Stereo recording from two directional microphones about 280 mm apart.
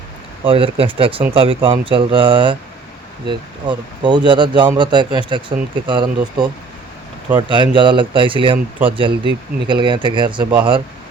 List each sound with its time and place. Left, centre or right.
0.4 s speech: centre